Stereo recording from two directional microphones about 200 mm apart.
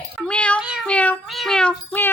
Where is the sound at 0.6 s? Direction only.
5° right (ahead or behind).